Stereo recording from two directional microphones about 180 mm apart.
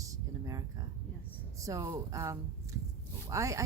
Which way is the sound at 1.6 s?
20° right (ahead or behind).